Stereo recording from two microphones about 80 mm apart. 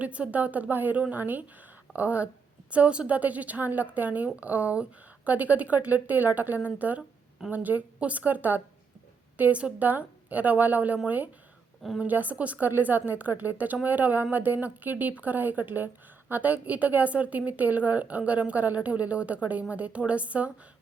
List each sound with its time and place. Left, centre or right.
0.0 s a woman's voice: centre